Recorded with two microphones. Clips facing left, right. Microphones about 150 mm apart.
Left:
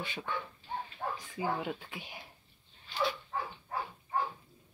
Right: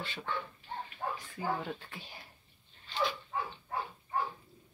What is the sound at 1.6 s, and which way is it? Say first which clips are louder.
Speech: left 2 dB; 15° left (ahead or behind).